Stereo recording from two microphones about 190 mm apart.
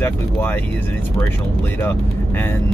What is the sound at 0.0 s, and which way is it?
Speech, 10° left (ahead or behind).